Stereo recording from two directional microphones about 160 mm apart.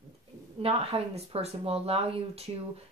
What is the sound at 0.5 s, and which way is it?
Speech, 40° right (ahead or behind).